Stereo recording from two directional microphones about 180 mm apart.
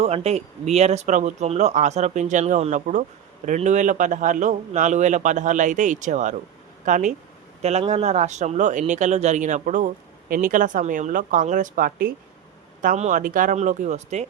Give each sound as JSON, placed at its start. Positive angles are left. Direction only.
{"t": 0.0, "sound": "speech", "side_deg": -35}